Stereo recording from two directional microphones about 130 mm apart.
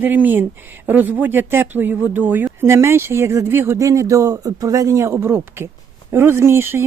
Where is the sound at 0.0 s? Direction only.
15° right (ahead or behind).